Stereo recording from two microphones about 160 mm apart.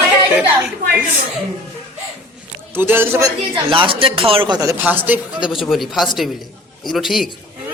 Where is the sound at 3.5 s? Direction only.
30° right (ahead or behind); by 7.2 s centre (ahead or behind).